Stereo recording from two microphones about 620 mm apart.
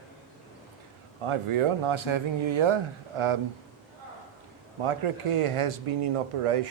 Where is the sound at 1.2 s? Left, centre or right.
Right.